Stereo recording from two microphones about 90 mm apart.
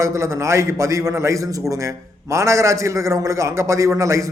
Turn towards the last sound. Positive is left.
turn(degrees=-35)  # may be behind; listen again after turning